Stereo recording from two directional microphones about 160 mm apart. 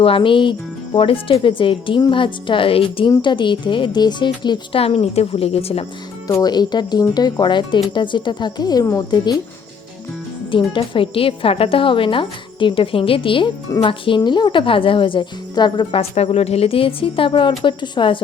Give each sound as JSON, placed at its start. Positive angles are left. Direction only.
{"t": 0.0, "sound": "speech", "side_deg": 35}
{"t": 6.2, "sound": "speech", "side_deg": 25}
{"t": 10.7, "sound": "speech", "side_deg": 35}